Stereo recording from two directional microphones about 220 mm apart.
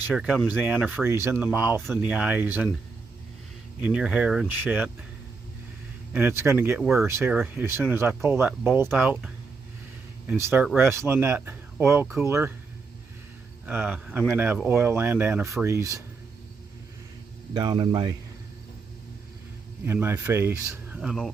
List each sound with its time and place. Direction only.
0.1 s speech: centre (ahead or behind)
3.8 s speech: 5° right (ahead or behind)
6.1 s speech: 10° right (ahead or behind)
13.7 s speech: 10° right (ahead or behind)
17.5 s speech: 20° right (ahead or behind)
19.8 s speech: 10° right (ahead or behind)